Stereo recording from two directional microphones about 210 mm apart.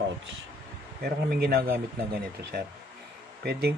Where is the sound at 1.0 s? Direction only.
50° right (ahead or behind).